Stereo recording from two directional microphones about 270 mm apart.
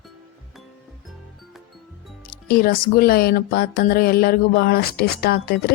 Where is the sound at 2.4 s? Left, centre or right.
Left.